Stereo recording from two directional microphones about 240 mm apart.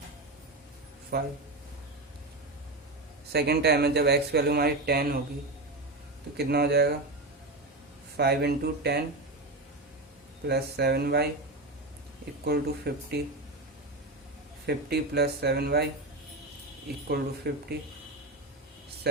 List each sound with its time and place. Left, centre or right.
1.1 s speech: right
3.3 s speech: right
6.3 s speech: right
8.1 s speech: right
10.4 s speech: right
12.5 s speech: right
14.7 s speech: right
17.5 s speech: right